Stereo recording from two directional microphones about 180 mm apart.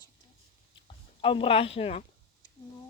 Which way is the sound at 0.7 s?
30° left (ahead or behind).